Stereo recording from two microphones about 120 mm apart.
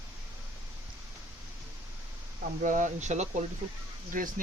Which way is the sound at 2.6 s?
90° right.